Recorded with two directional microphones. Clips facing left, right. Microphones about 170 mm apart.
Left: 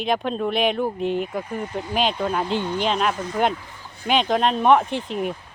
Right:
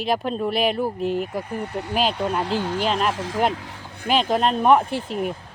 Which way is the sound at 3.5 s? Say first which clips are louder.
Right 3 dB; 80° right.